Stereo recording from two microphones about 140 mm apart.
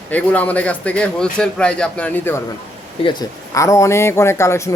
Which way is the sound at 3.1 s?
25° left (ahead or behind).